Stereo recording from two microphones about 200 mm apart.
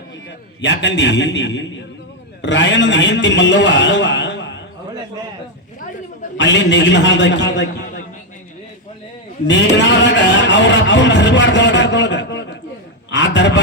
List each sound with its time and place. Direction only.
0.3 s a man's voice: 65° left (ahead or behind)
6.3 s a man's voice: 65° left (ahead or behind)
9.7 s speech: 60° left (ahead or behind)
13.1 s a sound: 65° left (ahead or behind)